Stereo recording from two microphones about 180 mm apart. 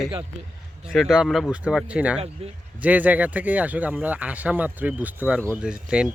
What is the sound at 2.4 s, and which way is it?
Speech, 35° right (ahead or behind).